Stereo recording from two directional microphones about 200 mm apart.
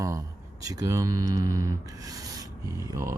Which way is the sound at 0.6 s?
15° right (ahead or behind).